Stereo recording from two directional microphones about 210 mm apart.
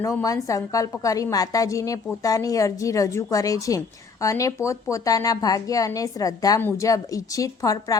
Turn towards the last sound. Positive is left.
turn(degrees=15)  # may be behind; listen again after turning